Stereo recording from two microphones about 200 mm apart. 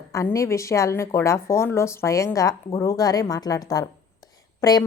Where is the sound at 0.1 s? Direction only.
15° left (ahead or behind).